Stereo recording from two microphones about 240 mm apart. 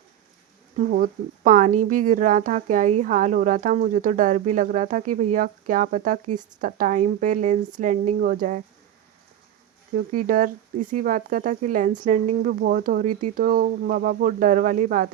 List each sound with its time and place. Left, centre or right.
0.9 s speech: right
9.9 s speech: right